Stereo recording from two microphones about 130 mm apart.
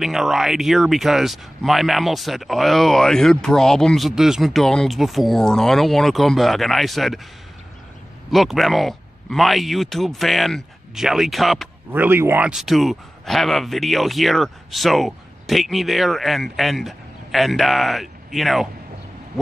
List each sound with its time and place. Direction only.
0.0 s speech: centre (ahead or behind)
8.3 s speech: centre (ahead or behind)
11.9 s speech: 15° right (ahead or behind); by 18.7 s centre (ahead or behind)